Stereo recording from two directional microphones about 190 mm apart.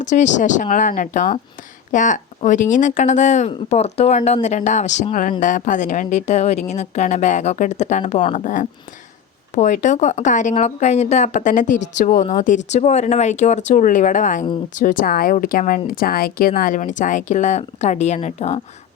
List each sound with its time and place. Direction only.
0.0 s speech: 40° left (ahead or behind)